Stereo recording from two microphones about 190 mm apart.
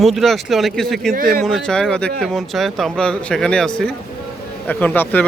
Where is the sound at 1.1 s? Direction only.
50° right (ahead or behind).